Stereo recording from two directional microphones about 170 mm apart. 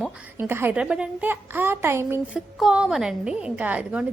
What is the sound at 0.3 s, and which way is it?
A woman's voice, 15° right (ahead or behind).